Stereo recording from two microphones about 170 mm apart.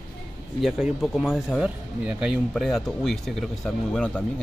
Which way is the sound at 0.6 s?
5° right (ahead or behind).